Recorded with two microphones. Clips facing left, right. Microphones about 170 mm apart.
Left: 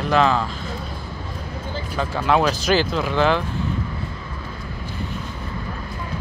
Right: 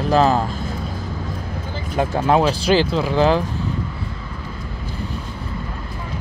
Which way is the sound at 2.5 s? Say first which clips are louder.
Right 3 dB; 30° right (ahead or behind).